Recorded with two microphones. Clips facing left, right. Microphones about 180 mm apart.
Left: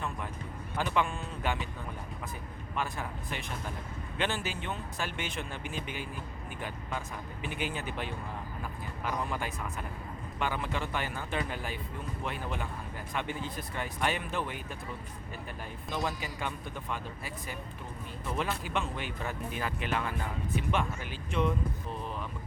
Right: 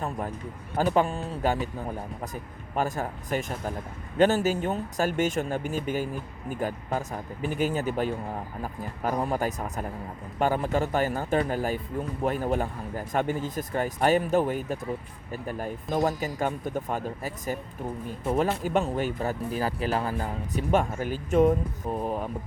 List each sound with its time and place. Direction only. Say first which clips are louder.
0.8 s a man's voice: right 7 dB; 40° right (ahead or behind)